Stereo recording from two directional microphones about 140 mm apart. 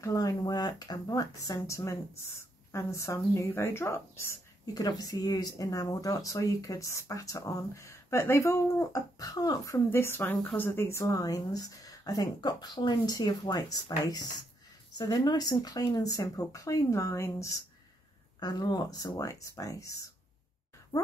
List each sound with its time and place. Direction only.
0.0 s a woman's voice: 25° left (ahead or behind)